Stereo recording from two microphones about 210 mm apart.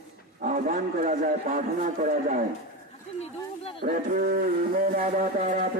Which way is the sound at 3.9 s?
45° right (ahead or behind).